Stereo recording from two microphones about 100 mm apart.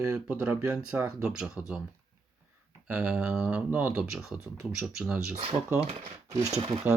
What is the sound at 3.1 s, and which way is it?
Speech, 10° right (ahead or behind).